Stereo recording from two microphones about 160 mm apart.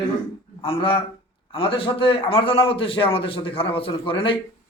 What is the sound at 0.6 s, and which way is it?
A man's voice, 35° left (ahead or behind).